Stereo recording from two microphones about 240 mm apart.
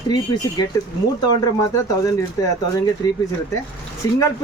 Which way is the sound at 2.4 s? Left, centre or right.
Centre.